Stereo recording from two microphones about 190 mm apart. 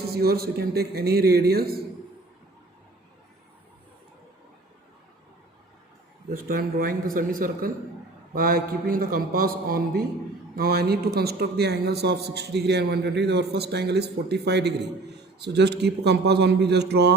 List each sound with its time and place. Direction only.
0.0 s a man's voice: 55° right (ahead or behind)
6.3 s a man's voice: 50° right (ahead or behind)